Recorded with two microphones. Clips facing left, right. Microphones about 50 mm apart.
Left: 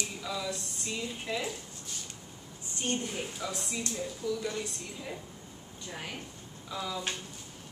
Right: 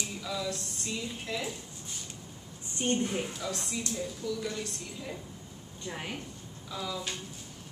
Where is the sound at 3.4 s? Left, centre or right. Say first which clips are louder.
Right 1 dB; centre.